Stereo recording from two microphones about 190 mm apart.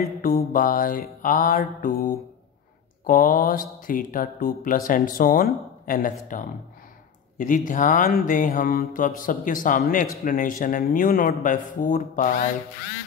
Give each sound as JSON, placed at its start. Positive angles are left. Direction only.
{"t": 0.2, "sound": "mantra", "side_deg": 50}